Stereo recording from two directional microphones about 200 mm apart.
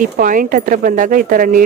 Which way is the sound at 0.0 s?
40° right (ahead or behind).